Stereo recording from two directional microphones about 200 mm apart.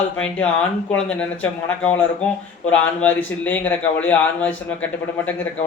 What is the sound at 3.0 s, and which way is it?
A man's voice, 5° left (ahead or behind).